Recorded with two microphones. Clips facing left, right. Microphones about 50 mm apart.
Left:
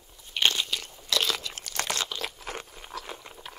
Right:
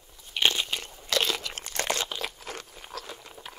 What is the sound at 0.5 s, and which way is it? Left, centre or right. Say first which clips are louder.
Crunch: even; right.